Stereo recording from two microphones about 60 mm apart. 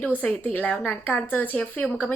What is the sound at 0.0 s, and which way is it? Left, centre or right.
A woman's voice, left.